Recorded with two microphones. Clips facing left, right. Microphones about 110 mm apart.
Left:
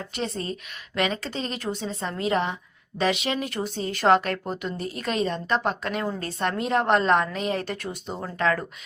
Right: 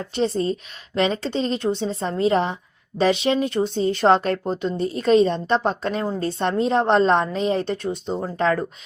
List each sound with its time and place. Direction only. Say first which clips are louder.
0.1 s a woman's voice: right 10 dB; 30° right (ahead or behind)